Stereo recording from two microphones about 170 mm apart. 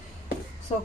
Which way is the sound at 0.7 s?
35° left (ahead or behind).